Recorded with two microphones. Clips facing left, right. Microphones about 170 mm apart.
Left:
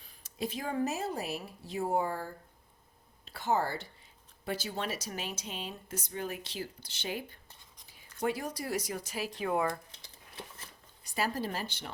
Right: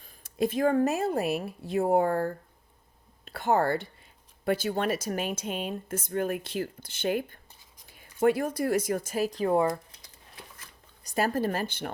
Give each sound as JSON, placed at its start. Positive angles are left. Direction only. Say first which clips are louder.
{"t": 0.0, "sound": "speech", "louder": "right 9 dB", "side_deg": -50}
{"t": 7.9, "sound": "writing", "louder": "right 5 dB", "side_deg": -55}
{"t": 8.2, "sound": "speech", "louder": "right 9 dB", "side_deg": -55}
{"t": 11.0, "sound": "speech", "louder": "right 7 dB", "side_deg": -50}